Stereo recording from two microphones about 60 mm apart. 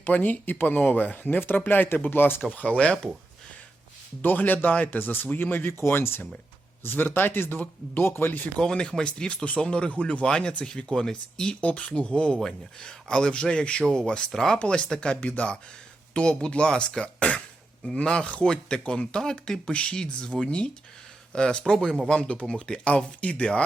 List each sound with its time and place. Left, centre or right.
0.0 s speech: left
2.4 s speech: left
2.6 s speech: centre
4.2 s speech: left
8.5 s speech: centre